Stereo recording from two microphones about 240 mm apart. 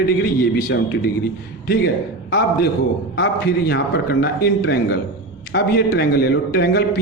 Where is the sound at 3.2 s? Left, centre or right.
Left.